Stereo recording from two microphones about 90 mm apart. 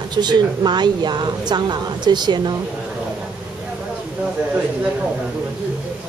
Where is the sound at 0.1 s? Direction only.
55° right (ahead or behind).